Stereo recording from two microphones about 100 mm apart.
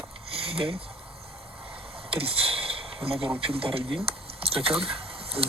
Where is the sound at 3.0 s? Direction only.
75° right (ahead or behind).